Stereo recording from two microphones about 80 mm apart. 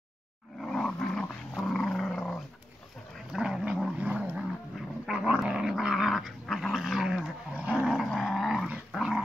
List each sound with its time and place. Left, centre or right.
0.6 s dog: centre
3.3 s dog: centre
7.6 s roar: centre
7.9 s roar: centre
8.9 s dog: centre